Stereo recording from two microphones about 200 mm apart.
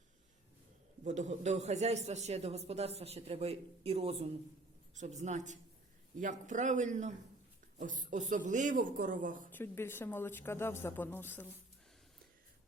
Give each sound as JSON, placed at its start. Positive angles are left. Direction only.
{"t": 1.0, "sound": "a man's voice", "side_deg": -35}
{"t": 9.5, "sound": "speech", "side_deg": 10}